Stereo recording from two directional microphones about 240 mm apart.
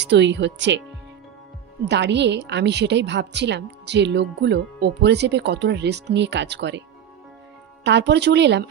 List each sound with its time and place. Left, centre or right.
0.0 s a woman's voice: right
1.9 s a woman's voice: right
7.8 s a woman's voice: right